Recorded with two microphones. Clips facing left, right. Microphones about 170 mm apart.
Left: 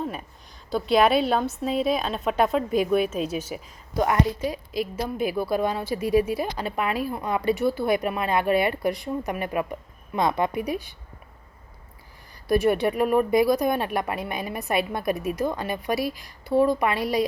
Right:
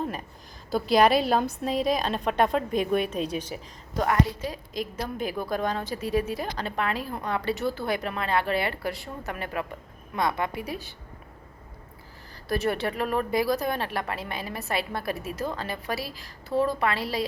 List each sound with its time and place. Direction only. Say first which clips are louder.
0.0 s a sound: left 1 dB; centre (ahead or behind)
0.7 s a woman's voice: left 1 dB; centre (ahead or behind)
12.5 s a woman's voice: left 6 dB; 15° left (ahead or behind)